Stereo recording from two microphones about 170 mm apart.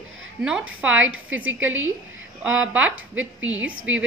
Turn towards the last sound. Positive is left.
turn(degrees=-10)  # may be behind; listen again after turning